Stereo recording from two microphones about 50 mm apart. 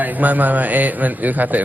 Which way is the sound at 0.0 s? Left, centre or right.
Right.